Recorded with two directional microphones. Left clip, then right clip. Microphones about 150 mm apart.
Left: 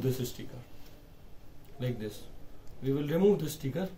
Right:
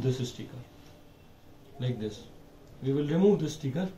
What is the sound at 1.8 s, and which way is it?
Speech, 5° left (ahead or behind).